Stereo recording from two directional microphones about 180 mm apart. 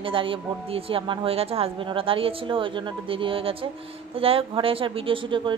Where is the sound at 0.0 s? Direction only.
30° right (ahead or behind).